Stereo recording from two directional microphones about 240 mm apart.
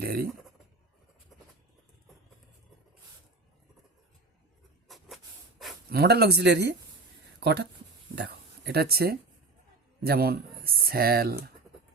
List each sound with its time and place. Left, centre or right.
0.0 s a sound: right
4.9 s hiss: centre
5.9 s speech: right